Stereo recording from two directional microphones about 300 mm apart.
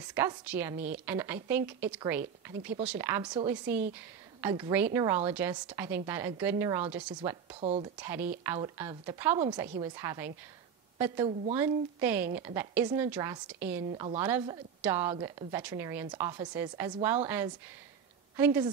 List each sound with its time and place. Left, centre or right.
0.1 s a woman's voice: centre
7.2 s a woman's voice: centre
8.0 s a woman's voice: centre
11.5 s a woman's voice: centre